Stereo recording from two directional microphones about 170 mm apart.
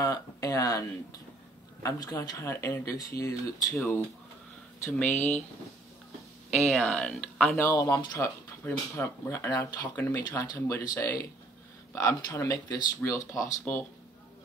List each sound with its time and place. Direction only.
0.0 s speech: 20° left (ahead or behind)
4.8 s speech: 10° left (ahead or behind)
6.6 s speech: 5° left (ahead or behind)
7.6 s speech: 20° left (ahead or behind)